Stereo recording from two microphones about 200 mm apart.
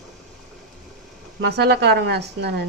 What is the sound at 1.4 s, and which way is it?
A woman's voice, 55° right (ahead or behind).